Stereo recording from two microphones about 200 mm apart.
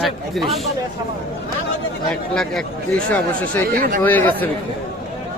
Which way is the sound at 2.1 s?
5° left (ahead or behind).